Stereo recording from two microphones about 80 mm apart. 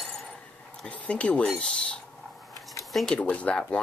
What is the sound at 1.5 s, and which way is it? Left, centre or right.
Speech, centre.